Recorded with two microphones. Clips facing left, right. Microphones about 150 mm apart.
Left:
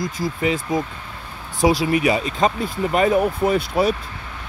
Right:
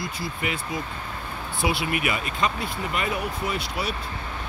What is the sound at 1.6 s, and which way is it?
Speech, 40° left (ahead or behind).